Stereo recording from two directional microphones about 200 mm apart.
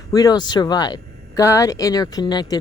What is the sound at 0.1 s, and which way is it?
A woman's voice, 20° left (ahead or behind).